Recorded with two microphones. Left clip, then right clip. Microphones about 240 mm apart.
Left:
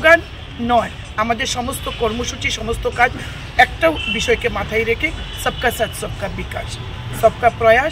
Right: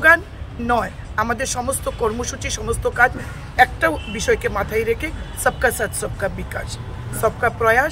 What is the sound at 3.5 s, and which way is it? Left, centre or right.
Speech, centre.